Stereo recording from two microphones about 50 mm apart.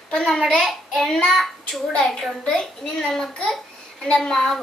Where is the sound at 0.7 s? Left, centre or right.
Centre.